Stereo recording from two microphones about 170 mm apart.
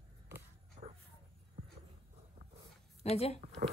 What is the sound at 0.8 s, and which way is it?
Dog, 50° right (ahead or behind).